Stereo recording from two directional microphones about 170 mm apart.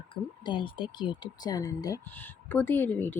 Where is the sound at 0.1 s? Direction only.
30° left (ahead or behind).